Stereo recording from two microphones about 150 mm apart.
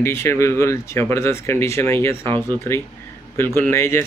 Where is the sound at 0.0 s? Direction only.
15° left (ahead or behind).